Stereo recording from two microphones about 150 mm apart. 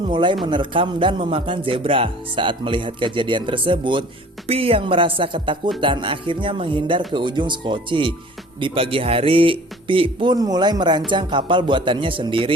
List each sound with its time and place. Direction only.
0.1 s a man's voice: 30° right (ahead or behind)